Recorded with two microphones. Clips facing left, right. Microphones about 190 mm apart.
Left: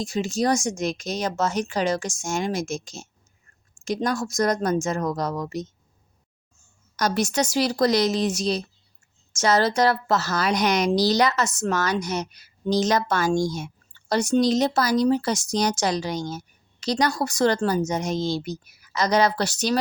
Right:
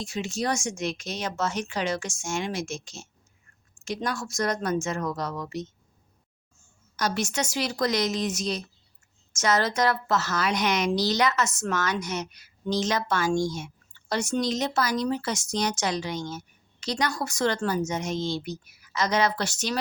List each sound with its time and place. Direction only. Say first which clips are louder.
0.0 s a woman's voice: left 6 dB; 40° left (ahead or behind)
6.9 s a woman's voice: left 5 dB; 40° left (ahead or behind)